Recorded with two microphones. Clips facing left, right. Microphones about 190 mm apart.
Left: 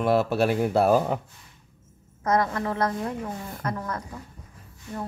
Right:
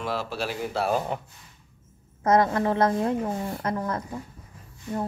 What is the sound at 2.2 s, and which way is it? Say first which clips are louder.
Speech: right 3 dB; 25° right (ahead or behind).